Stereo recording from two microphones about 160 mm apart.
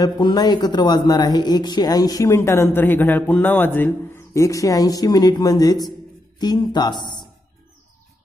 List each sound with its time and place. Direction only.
0.0 s speech: 25° left (ahead or behind)